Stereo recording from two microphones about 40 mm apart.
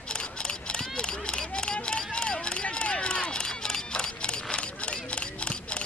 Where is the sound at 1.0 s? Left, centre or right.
Left.